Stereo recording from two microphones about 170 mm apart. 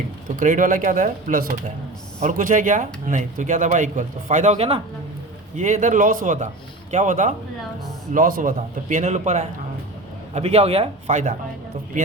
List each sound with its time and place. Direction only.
0.3 s a man's voice: 50° right (ahead or behind)